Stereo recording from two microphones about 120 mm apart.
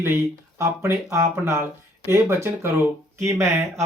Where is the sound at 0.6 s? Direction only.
25° right (ahead or behind).